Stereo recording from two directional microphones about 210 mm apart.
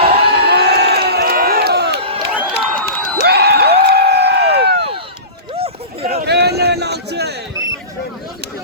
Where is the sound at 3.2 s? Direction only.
50° right (ahead or behind).